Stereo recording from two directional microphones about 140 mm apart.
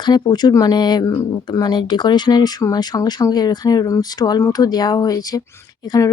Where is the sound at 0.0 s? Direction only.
30° left (ahead or behind).